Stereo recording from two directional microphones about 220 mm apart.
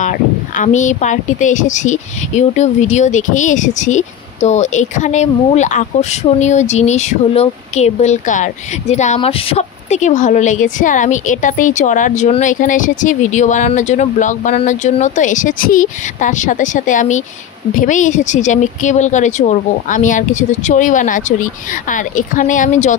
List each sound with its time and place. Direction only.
0.0 s speech: 35° left (ahead or behind)